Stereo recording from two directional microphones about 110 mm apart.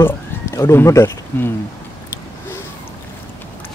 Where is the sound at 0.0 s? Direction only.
25° left (ahead or behind).